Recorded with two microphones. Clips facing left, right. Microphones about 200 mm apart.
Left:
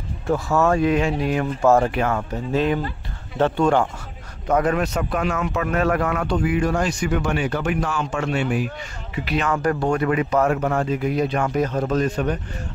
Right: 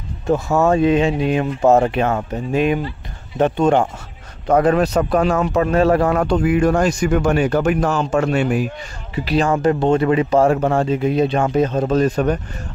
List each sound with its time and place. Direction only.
0.3 s speech: 20° right (ahead or behind)
4.5 s a man's voice: 30° right (ahead or behind)
6.4 s a man's voice: 50° right (ahead or behind)
9.1 s speech: 35° right (ahead or behind)
12.0 s a man's voice: 45° right (ahead or behind)